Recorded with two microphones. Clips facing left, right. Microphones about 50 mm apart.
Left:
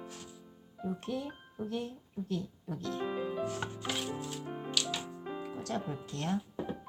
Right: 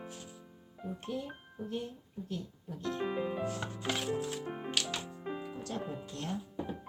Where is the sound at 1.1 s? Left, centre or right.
Left.